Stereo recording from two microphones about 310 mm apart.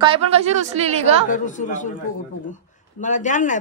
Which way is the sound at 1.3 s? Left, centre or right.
Left.